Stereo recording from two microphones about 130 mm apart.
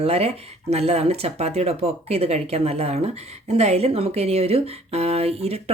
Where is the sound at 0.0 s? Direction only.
50° right (ahead or behind).